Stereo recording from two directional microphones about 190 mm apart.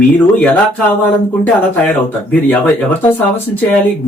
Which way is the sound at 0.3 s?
10° left (ahead or behind).